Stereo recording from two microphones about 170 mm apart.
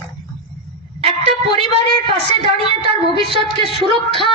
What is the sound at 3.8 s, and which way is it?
Speech, 30° right (ahead or behind).